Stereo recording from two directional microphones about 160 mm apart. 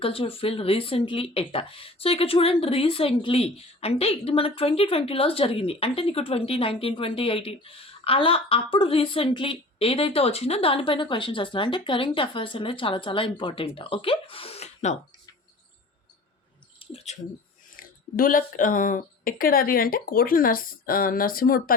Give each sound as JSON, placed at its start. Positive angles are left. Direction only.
{"t": 0.0, "sound": "speech", "side_deg": 35}
{"t": 16.8, "sound": "a sound", "side_deg": 40}
{"t": 17.7, "sound": "speech", "side_deg": 60}